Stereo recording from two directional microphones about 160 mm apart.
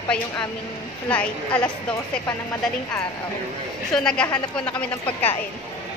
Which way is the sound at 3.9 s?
5° left (ahead or behind).